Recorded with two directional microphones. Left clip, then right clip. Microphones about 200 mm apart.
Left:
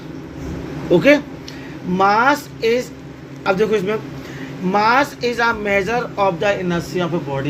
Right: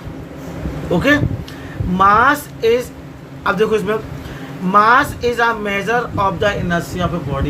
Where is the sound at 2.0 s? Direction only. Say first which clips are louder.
Right 3 dB; 15° right (ahead or behind).